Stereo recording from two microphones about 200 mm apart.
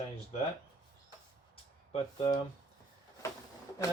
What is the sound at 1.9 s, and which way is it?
Speech, 25° left (ahead or behind).